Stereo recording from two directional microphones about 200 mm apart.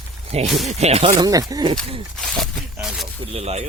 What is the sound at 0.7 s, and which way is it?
Speech, 30° right (ahead or behind).